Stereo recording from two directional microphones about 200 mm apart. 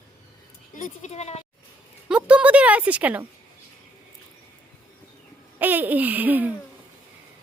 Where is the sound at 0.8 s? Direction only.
40° left (ahead or behind).